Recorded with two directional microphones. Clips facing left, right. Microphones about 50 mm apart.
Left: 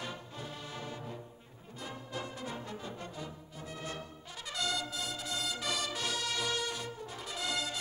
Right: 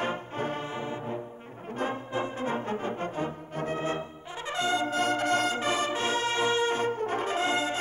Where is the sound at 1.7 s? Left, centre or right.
Right.